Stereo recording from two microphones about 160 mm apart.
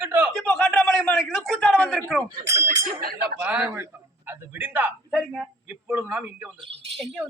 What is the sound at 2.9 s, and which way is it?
Speech, 70° right (ahead or behind).